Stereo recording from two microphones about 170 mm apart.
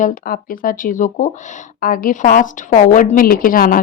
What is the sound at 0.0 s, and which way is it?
A woman's voice, 55° left (ahead or behind).